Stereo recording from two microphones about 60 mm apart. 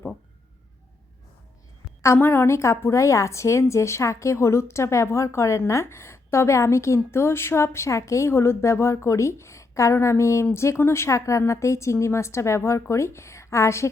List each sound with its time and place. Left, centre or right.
2.1 s a woman's voice: left